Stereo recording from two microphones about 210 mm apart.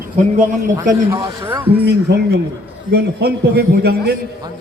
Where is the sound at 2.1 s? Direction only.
50° right (ahead or behind).